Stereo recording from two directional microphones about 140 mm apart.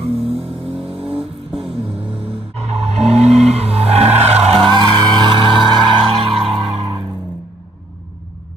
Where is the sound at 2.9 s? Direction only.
50° right (ahead or behind).